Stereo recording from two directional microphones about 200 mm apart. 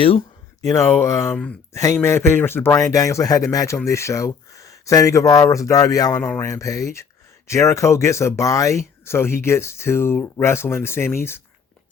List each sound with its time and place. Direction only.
0.0 s speech: 25° left (ahead or behind)